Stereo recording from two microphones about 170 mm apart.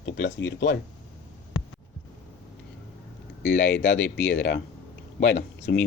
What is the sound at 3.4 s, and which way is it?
Speech, 90° left.